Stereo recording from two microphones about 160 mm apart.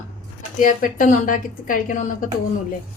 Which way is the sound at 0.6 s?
55° left (ahead or behind).